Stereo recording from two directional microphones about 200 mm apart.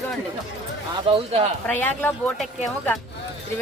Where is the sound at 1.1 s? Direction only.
30° right (ahead or behind).